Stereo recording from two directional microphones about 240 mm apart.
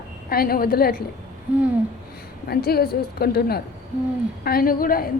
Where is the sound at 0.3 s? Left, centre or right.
Left.